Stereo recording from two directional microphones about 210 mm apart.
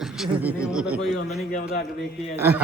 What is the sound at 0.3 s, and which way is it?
Speech, 5° right (ahead or behind).